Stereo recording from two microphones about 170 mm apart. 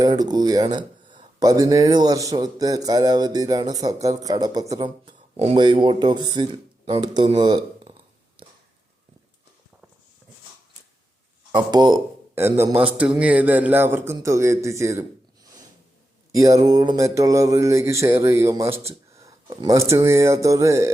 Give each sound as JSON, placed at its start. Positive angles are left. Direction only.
{"t": 0.0, "sound": "speech", "side_deg": -25}
{"t": 5.4, "sound": "speech", "side_deg": -30}
{"t": 11.5, "sound": "speech", "side_deg": -25}
{"t": 12.3, "sound": "a man's voice", "side_deg": -15}
{"t": 16.3, "sound": "a man's voice", "side_deg": -20}